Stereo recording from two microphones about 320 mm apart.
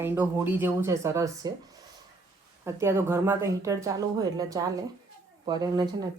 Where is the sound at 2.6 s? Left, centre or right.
Centre.